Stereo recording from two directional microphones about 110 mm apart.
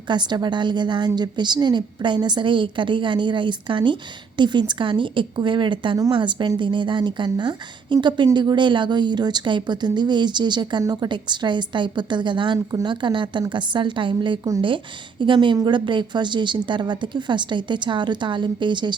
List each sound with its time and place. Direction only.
0.1 s speech: 40° right (ahead or behind)